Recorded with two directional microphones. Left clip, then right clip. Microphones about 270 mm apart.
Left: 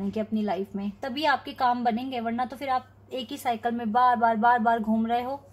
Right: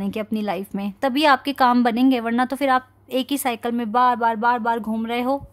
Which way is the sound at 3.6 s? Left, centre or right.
Right.